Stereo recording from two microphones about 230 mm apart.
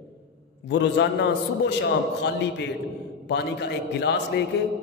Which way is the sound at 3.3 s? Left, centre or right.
Left.